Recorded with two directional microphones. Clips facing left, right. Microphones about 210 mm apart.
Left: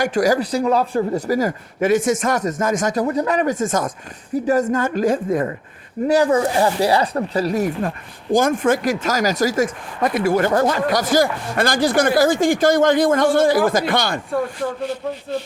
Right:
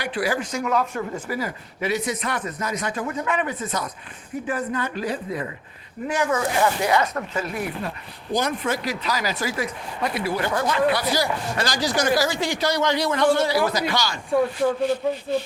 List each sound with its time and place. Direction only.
0.0 s speech: 45° left (ahead or behind)
6.1 s speech: 35° left (ahead or behind); by 14.2 s 55° left (ahead or behind)